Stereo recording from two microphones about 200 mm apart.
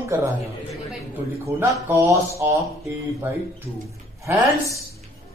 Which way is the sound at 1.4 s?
15° right (ahead or behind).